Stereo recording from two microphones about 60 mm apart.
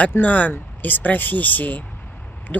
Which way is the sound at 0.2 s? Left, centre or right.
Left.